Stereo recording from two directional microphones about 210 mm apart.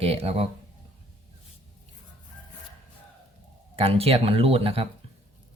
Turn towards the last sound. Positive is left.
turn(degrees=-30)  # may be behind; listen again after turning